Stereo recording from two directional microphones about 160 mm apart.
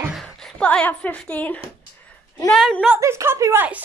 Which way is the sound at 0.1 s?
5° left (ahead or behind).